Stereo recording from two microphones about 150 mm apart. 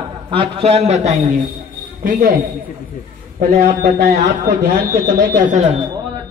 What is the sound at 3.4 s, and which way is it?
Speech, 80° right.